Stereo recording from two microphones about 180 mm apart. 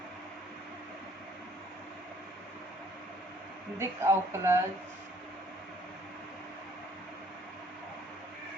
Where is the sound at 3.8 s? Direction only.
15° right (ahead or behind).